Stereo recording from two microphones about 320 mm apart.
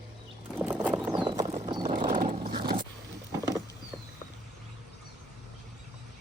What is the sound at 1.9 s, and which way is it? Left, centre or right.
Dog, right.